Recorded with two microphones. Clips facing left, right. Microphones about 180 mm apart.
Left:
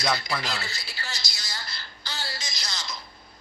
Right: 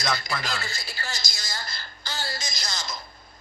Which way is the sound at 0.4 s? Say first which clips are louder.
Right 1 dB; 45° right (ahead or behind).